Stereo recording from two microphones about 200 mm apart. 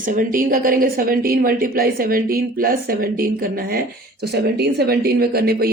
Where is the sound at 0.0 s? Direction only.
45° right (ahead or behind).